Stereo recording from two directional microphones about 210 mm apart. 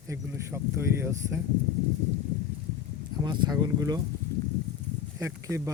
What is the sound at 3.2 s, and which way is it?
Speech, 20° right (ahead or behind).